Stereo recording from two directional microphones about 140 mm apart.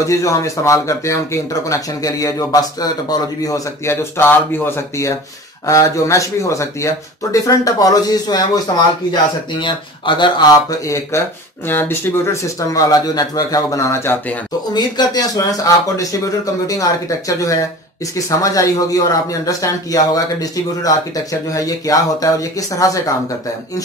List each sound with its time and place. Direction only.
0.0 s speech: 20° left (ahead or behind)
14.7 s speech: 30° left (ahead or behind)
17.3 s speech: 25° left (ahead or behind)